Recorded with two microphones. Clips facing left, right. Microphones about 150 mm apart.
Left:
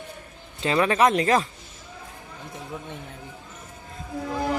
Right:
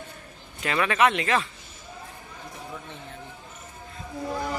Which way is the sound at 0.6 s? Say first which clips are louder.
Left 3 dB; 30° left (ahead or behind).